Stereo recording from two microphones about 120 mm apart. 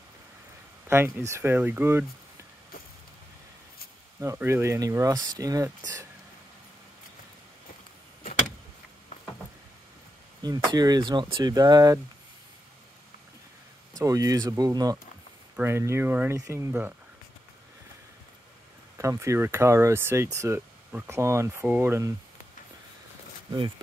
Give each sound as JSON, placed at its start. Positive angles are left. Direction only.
{"t": 0.8, "sound": "speech", "side_deg": -20}
{"t": 4.2, "sound": "speech", "side_deg": -20}
{"t": 10.4, "sound": "speech", "side_deg": -35}
{"t": 13.9, "sound": "speech", "side_deg": -30}
{"t": 15.5, "sound": "speech", "side_deg": -20}
{"t": 16.3, "sound": "speech", "side_deg": -25}
{"t": 18.9, "sound": "speech", "side_deg": -25}